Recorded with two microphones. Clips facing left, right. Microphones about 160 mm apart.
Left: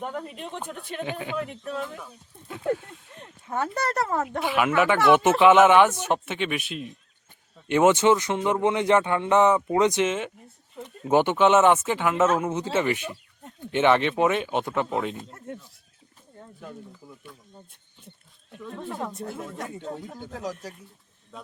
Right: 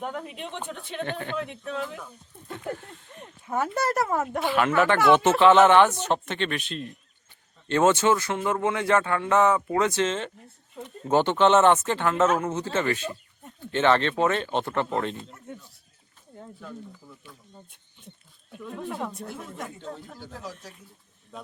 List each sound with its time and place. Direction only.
0.0 s speech: centre (ahead or behind)
3.2 s speech: 10° right (ahead or behind)
18.5 s speech: 5° right (ahead or behind)
19.8 s speech: 15° left (ahead or behind)